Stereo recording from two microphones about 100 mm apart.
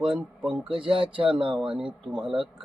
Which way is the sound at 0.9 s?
60° right (ahead or behind).